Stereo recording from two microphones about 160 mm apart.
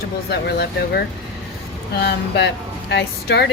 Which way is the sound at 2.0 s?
90° left.